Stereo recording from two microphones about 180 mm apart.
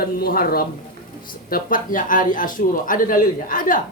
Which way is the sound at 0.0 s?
55° left (ahead or behind).